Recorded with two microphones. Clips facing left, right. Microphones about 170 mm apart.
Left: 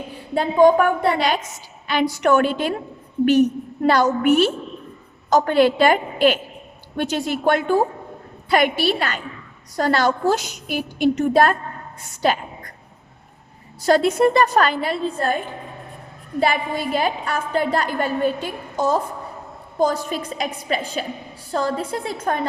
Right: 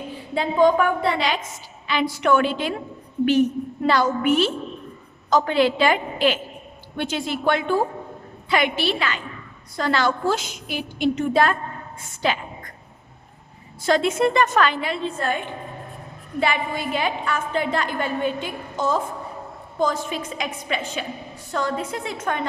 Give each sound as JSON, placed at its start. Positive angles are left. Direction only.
{"t": 0.3, "sound": "a woman's voice", "side_deg": 45}
{"t": 3.8, "sound": "a woman's voice", "side_deg": 45}
{"t": 12.2, "sound": "a sound", "side_deg": 40}
{"t": 13.8, "sound": "a woman's voice", "side_deg": 40}